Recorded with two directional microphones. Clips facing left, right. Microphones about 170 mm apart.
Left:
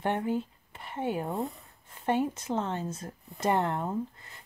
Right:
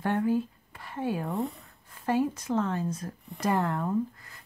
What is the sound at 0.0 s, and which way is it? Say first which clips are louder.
Speech: right 3 dB; 20° left (ahead or behind).